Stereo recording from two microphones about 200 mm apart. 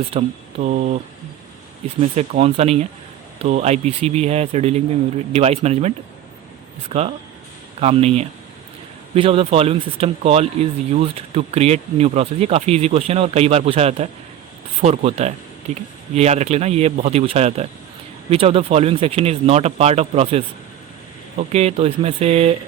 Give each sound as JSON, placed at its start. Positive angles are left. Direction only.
{"t": 0.0, "sound": "speech", "side_deg": -30}
{"t": 2.0, "sound": "speech", "side_deg": -30}
{"t": 6.9, "sound": "speech", "side_deg": -35}